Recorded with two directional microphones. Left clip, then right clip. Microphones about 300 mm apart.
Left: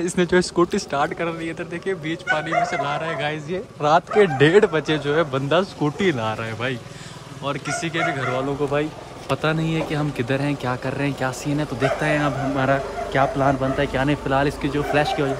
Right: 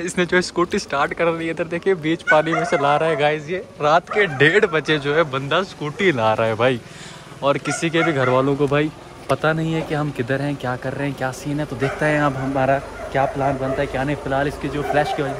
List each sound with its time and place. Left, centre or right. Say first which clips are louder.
0.0 s a man's voice: even; centre
8.4 s speech: right 4 dB; right
9.3 s speech: right 3 dB; centre